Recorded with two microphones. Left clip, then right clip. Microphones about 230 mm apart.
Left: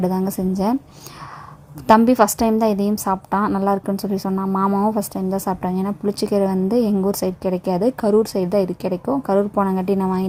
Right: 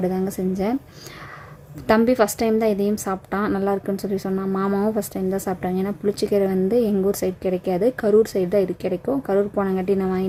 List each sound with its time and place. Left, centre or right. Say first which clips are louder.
0.0 s a woman's voice: left 2 dB; centre
1.9 s a woman's voice: left 4 dB; centre